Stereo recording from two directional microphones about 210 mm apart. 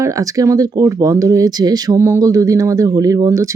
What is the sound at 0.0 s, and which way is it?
Speech, 15° right (ahead or behind).